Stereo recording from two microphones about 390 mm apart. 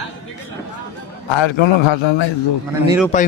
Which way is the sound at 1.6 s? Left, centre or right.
Left.